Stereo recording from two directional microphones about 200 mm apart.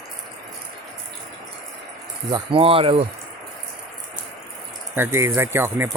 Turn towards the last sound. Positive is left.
turn(degrees=-10)  # may be behind; listen again after turning